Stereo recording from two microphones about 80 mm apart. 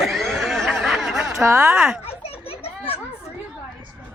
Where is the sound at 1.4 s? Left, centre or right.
Right.